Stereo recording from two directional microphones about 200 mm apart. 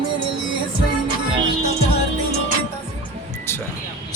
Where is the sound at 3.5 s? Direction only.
10° left (ahead or behind).